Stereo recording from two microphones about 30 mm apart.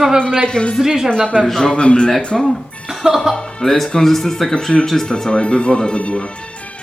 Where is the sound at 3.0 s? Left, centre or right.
Centre.